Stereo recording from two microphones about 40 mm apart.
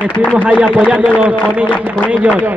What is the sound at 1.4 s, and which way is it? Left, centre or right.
Speech, left.